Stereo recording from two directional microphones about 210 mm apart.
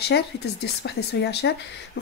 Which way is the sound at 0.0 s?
50° left (ahead or behind).